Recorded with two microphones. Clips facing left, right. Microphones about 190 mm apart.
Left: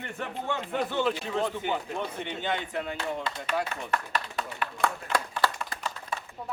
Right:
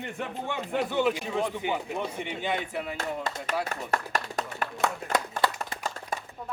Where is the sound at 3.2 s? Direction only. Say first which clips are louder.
Even; 45° right (ahead or behind).